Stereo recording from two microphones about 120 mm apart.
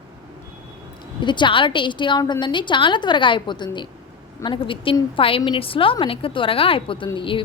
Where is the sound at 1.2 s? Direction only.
40° left (ahead or behind).